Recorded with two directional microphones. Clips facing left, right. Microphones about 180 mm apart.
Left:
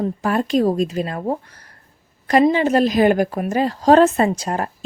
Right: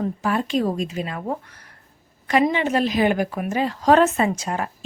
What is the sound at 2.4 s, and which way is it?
Speech, 35° left (ahead or behind).